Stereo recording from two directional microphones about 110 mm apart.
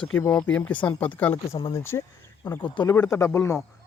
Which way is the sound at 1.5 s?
45° left (ahead or behind).